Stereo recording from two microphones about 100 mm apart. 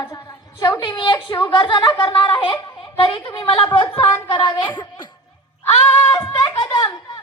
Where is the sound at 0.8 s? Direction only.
55° left (ahead or behind).